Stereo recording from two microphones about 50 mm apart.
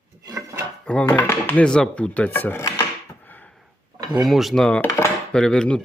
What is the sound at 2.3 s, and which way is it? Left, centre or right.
Dishes, left.